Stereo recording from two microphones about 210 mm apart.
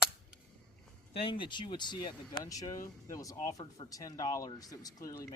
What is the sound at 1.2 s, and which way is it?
Speech, 25° left (ahead or behind).